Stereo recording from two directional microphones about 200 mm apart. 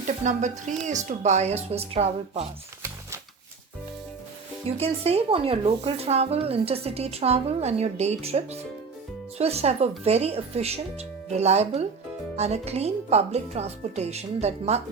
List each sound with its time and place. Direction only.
0.0 s speech: 35° right (ahead or behind)
4.8 s speech: 30° right (ahead or behind)